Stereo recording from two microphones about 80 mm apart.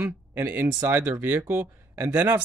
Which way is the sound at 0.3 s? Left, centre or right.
Right.